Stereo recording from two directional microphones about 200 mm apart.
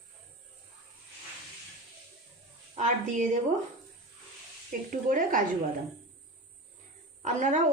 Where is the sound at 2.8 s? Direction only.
40° right (ahead or behind).